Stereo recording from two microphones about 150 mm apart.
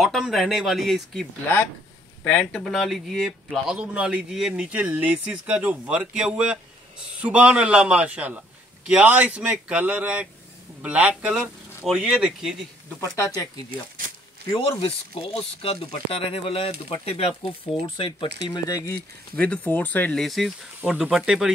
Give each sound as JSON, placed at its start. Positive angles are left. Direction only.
{"t": 0.0, "sound": "speech", "side_deg": 0}
{"t": 2.2, "sound": "speech", "side_deg": 5}
{"t": 13.0, "sound": "speech", "side_deg": 20}
{"t": 14.5, "sound": "speech", "side_deg": 35}
{"t": 18.5, "sound": "speech", "side_deg": 25}
{"t": 19.3, "sound": "speech", "side_deg": 10}